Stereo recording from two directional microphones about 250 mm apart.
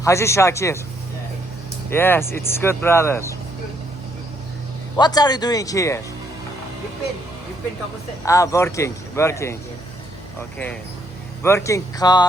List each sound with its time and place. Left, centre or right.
0.0 s speech: centre
1.9 s speech: centre
4.9 s speech: centre
8.2 s speech: centre
11.4 s speech: centre